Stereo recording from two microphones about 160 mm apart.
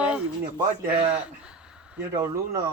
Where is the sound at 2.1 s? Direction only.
20° right (ahead or behind).